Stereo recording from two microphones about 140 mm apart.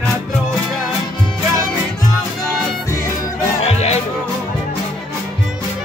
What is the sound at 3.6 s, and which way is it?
Music, 50° left (ahead or behind).